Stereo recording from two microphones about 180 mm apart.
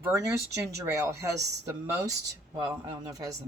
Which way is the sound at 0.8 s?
15° right (ahead or behind).